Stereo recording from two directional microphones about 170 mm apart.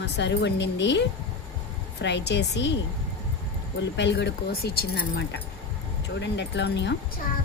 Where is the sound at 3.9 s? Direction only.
90° left; by 5.4 s 75° left (ahead or behind).